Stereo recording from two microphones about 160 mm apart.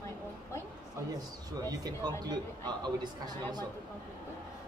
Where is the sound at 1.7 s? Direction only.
25° right (ahead or behind).